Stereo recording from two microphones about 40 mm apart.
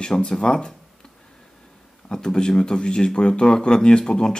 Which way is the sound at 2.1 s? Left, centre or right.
Centre.